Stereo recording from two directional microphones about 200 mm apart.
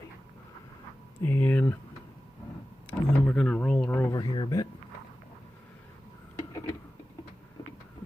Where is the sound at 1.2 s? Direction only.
10° left (ahead or behind).